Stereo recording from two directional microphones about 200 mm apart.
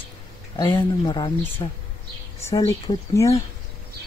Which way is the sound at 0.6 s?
20° left (ahead or behind).